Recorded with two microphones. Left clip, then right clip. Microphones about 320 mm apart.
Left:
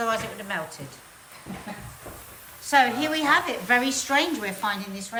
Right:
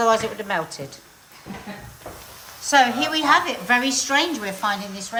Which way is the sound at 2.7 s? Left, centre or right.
Centre.